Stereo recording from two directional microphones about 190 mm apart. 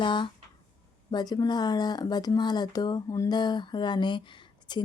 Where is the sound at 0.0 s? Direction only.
25° left (ahead or behind).